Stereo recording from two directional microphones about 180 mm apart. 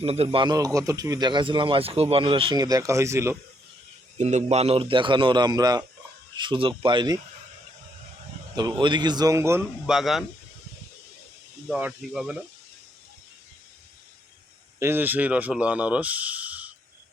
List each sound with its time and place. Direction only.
0.0 s speech: 35° right (ahead or behind); by 3.3 s 15° right (ahead or behind)
4.2 s speech: 40° right (ahead or behind)
8.5 s speech: 25° right (ahead or behind)
9.8 s speech: centre (ahead or behind)
11.7 s speech: 5° right (ahead or behind)
14.8 s speech: 10° right (ahead or behind)